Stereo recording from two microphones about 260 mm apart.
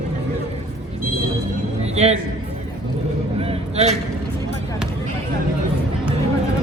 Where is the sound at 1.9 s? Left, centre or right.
Right.